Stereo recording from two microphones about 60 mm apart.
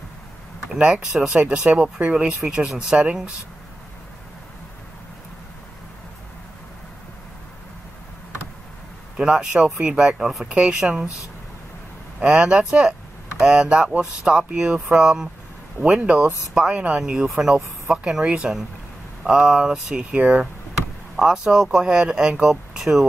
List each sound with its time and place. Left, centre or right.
0.7 s speech: centre
9.1 s speech: centre
12.2 s speech: centre
21.2 s speech: centre